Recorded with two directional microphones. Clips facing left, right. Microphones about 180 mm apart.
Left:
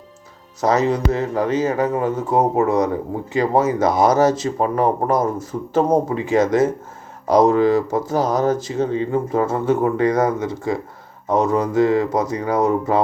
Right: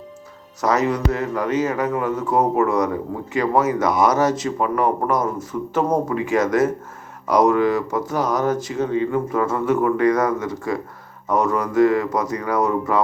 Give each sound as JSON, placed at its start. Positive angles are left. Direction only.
{"t": 0.6, "sound": "speech", "side_deg": 30}